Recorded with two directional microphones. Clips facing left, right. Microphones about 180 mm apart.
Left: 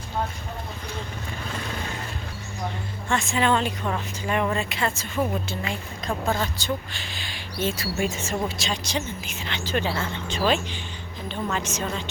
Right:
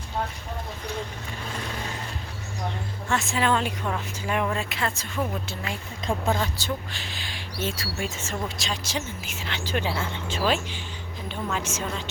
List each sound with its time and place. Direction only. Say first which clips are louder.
3.1 s speech: left 2 dB; 5° right (ahead or behind)
8.0 s speech: left 4 dB; 10° left (ahead or behind)
8.5 s speech: left 2 dB; centre (ahead or behind)